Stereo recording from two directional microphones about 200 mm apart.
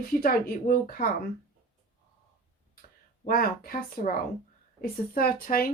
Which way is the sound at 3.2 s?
45° left (ahead or behind).